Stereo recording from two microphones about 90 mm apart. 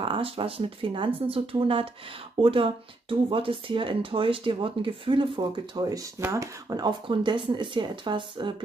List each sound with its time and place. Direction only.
0.0 s speech: 80° right
5.8 s speech: 40° right (ahead or behind)
6.8 s speech: 60° right (ahead or behind)